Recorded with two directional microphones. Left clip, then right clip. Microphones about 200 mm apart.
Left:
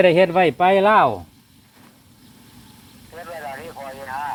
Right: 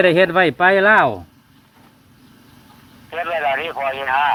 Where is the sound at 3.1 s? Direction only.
45° right (ahead or behind).